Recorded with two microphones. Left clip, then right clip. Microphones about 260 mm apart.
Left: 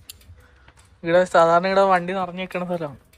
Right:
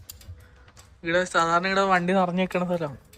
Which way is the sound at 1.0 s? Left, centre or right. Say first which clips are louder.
Left 7 dB; centre.